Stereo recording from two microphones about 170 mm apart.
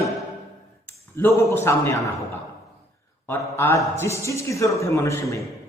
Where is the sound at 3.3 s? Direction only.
15° left (ahead or behind).